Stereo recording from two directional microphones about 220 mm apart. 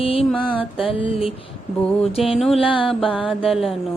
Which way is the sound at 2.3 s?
Centre (ahead or behind).